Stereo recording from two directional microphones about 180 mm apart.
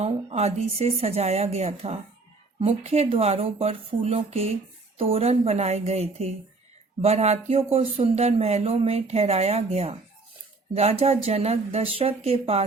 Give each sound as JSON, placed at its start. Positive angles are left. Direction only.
{"t": 0.0, "sound": "speech", "side_deg": -35}